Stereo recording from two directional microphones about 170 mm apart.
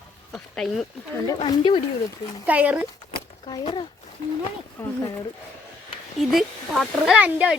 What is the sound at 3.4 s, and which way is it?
Speech, 30° left (ahead or behind).